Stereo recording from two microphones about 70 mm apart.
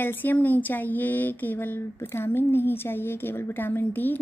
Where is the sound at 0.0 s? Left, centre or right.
Left.